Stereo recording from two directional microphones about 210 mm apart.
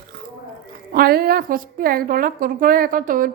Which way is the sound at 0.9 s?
45° right (ahead or behind).